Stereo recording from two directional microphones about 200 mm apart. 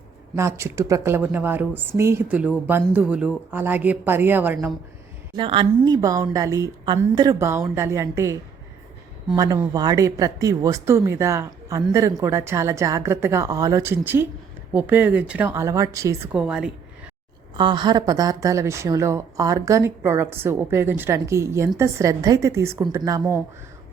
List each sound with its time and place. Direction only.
0.3 s speech: 15° right (ahead or behind)
5.3 s speech: 25° right (ahead or behind); by 16.7 s 5° right (ahead or behind)
17.6 s speech: 25° right (ahead or behind)